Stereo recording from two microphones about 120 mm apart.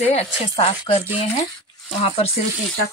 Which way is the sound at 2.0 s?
55° left (ahead or behind).